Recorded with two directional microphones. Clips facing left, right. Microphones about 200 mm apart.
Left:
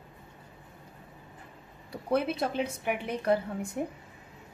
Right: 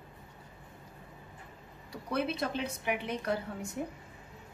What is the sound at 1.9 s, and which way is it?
A woman's voice, 55° left (ahead or behind).